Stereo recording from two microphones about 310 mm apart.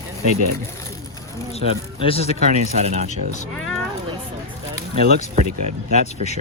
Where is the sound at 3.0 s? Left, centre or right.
Left.